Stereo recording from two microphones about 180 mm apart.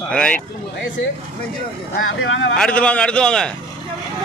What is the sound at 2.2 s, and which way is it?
Speech, 90° left.